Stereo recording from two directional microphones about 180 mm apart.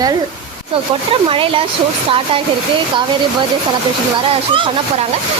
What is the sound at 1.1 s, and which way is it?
Speech, 30° right (ahead or behind).